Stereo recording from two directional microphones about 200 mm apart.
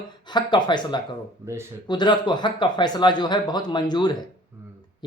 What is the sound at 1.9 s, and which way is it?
Speech, 20° left (ahead or behind).